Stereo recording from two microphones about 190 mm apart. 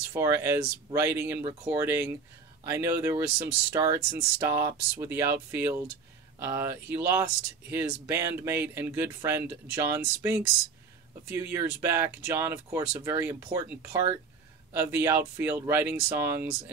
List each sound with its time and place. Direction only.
0.1 s speech: 15° right (ahead or behind)
1.4 s speech: 30° right (ahead or behind)
1.7 s speech: 15° right (ahead or behind)